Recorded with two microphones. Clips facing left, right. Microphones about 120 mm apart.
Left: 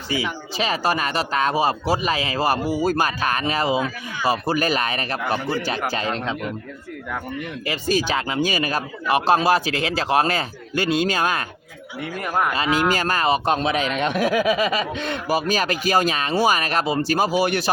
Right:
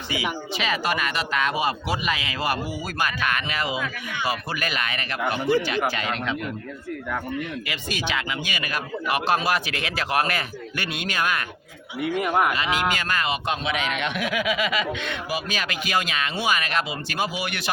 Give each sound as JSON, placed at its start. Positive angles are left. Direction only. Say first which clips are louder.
{"t": 0.5, "sound": "speech", "louder": "left 5 dB", "side_deg": 35}
{"t": 7.7, "sound": "speech", "louder": "left 11 dB", "side_deg": 35}
{"t": 12.5, "sound": "speech", "louder": "left 4 dB", "side_deg": 35}